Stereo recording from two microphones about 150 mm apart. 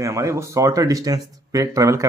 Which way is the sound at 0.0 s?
20° right (ahead or behind).